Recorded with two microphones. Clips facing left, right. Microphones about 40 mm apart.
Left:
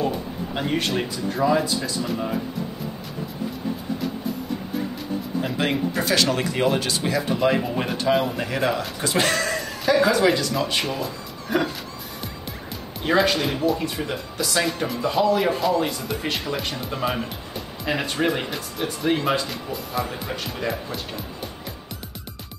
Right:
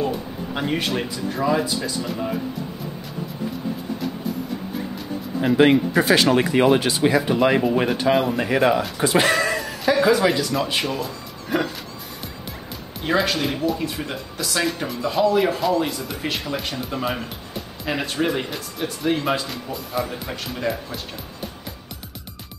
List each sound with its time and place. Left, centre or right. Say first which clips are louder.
0.6 s speech: even; centre
5.4 s speech: right 8 dB; centre
6.0 s speech: right 6 dB; centre
6.3 s speech: right 5 dB; centre
7.6 s speech: right 4 dB; centre
8.5 s speech: right 5 dB; centre
13.0 s speech: left 1 dB; centre